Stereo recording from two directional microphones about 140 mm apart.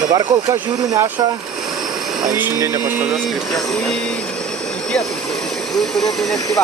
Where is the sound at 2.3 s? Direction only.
20° right (ahead or behind).